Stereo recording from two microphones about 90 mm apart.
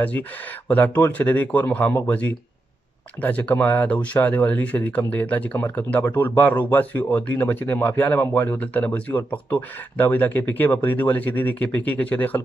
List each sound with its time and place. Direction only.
0.7 s speech: 20° left (ahead or behind)